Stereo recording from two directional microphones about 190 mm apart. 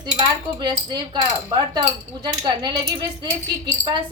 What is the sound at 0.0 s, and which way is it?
A woman's voice, 25° right (ahead or behind).